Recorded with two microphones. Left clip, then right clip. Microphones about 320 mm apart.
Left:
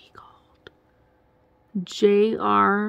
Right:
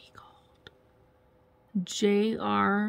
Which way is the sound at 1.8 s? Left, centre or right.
Centre.